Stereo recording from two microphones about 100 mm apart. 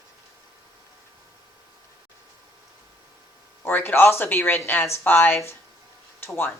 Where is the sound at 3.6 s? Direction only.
20° left (ahead or behind).